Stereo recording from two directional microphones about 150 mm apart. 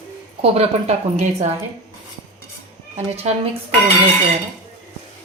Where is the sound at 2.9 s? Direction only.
45° right (ahead or behind).